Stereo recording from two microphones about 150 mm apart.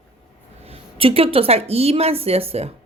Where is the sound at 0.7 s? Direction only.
40° right (ahead or behind).